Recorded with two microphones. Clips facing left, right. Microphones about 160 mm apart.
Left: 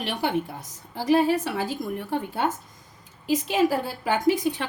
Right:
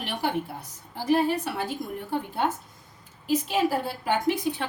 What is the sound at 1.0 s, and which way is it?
Speech, 90° left.